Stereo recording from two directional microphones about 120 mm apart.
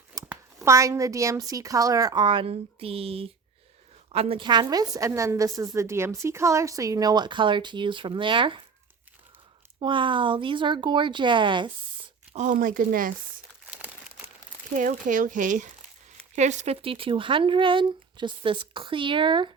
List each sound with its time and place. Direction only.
0.1 s a woman's voice: 25° right (ahead or behind); by 4.4 s 55° right (ahead or behind)
4.4 s a woman's voice: 35° right (ahead or behind)
9.8 s speech: 45° right (ahead or behind)
12.3 s speech: 80° right
14.7 s speech: 90° right
16.8 s speech: 50° right (ahead or behind)